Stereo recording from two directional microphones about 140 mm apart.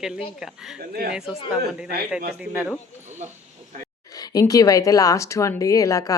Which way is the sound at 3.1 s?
60° right (ahead or behind).